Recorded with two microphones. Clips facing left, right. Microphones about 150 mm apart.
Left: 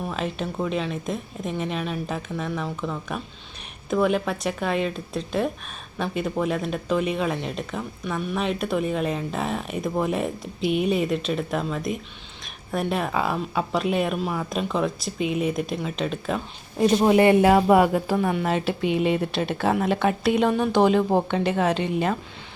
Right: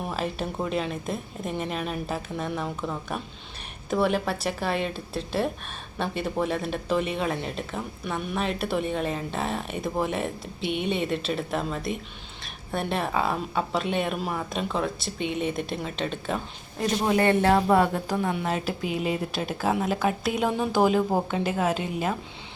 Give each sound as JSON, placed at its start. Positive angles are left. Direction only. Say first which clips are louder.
{"t": 0.1, "sound": "a woman's voice", "louder": "left 1 dB", "side_deg": -5}
{"t": 15.4, "sound": "speech", "louder": "left 3 dB", "side_deg": -25}
{"t": 15.7, "sound": "a woman's voice", "louder": "left 3 dB", "side_deg": 0}
{"t": 17.0, "sound": "a woman's voice", "louder": "left 4 dB", "side_deg": 15}